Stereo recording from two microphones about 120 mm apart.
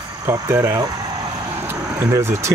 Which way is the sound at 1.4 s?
20° right (ahead or behind).